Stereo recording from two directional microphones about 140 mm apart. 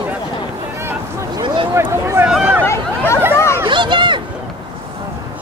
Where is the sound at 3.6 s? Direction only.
35° right (ahead or behind).